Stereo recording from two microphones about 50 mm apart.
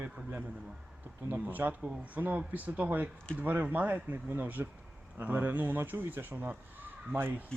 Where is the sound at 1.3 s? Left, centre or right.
Right.